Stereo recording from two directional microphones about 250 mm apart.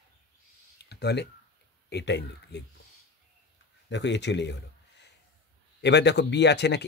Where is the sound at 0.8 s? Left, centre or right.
Left.